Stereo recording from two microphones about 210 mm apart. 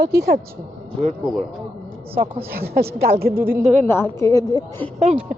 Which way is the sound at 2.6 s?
50° right (ahead or behind).